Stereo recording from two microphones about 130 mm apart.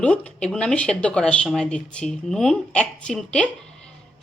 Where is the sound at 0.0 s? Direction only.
10° left (ahead or behind).